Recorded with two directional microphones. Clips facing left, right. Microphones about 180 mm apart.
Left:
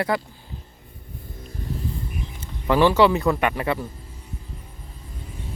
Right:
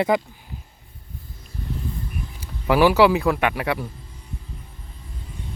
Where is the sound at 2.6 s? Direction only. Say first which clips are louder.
Right 1 dB; 10° right (ahead or behind).